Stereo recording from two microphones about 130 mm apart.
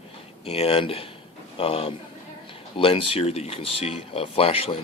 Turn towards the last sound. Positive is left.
turn(degrees=50)  # may be behind; listen again after turning